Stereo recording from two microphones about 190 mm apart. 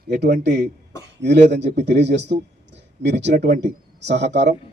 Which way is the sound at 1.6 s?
40° right (ahead or behind).